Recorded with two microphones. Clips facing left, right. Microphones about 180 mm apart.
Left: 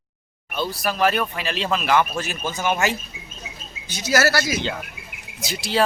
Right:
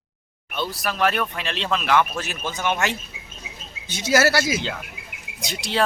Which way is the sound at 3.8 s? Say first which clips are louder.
Right 1 dB; 25° right (ahead or behind).